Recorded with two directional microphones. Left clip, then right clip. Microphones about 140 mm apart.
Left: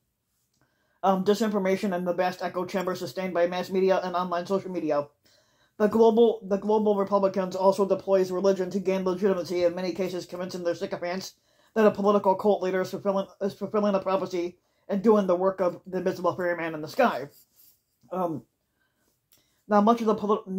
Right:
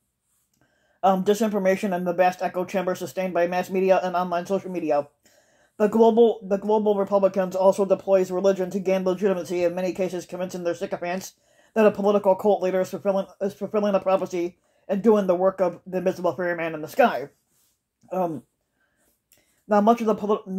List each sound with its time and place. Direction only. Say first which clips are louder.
1.0 s speech: right 3 dB; 20° right (ahead or behind)
19.7 s speech: right 2 dB; 20° right (ahead or behind)